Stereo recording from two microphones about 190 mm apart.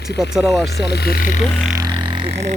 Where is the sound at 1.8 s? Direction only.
20° right (ahead or behind).